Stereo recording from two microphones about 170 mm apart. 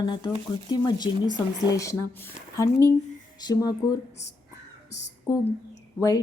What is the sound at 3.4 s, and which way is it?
Speech, 20° left (ahead or behind).